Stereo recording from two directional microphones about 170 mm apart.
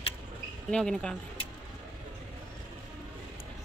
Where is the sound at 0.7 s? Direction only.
5° left (ahead or behind).